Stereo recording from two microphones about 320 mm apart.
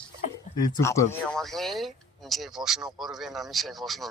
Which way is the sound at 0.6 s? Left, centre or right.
Centre.